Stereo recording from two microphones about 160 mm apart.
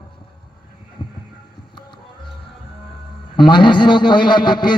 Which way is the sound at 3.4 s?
30° left (ahead or behind).